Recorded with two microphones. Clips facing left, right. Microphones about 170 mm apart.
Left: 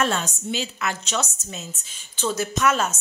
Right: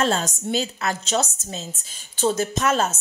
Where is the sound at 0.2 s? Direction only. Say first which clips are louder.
Right 4 dB; 40° right (ahead or behind).